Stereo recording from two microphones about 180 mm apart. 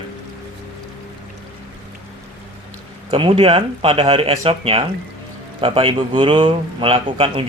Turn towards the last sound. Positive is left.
turn(degrees=-30)  # may be behind; listen again after turning